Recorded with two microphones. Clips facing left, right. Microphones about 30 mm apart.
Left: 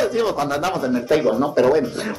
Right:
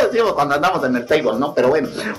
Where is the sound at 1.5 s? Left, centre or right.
Centre.